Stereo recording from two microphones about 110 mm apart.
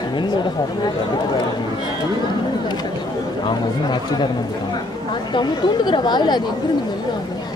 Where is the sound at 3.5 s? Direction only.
45° left (ahead or behind).